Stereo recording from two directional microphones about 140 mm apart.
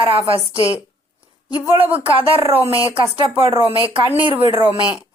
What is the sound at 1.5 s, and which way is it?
Speech, 30° left (ahead or behind).